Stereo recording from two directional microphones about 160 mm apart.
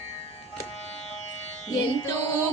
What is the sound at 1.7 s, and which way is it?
Music, 20° left (ahead or behind).